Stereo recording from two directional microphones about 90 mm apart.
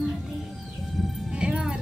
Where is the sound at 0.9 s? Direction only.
Centre (ahead or behind).